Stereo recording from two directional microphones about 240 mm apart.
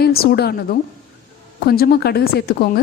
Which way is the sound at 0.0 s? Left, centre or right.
Left.